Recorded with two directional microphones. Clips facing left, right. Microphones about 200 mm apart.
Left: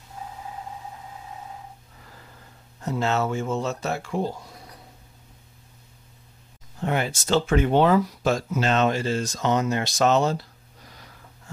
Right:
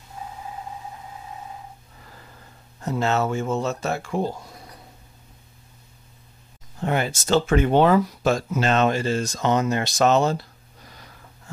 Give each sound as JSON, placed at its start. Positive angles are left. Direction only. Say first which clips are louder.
{"t": 2.8, "sound": "speech", "louder": "right 2 dB", "side_deg": -45}
{"t": 6.8, "sound": "speech", "louder": "right 2 dB", "side_deg": -40}